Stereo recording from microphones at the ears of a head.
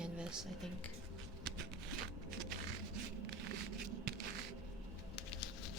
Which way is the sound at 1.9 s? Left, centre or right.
Right.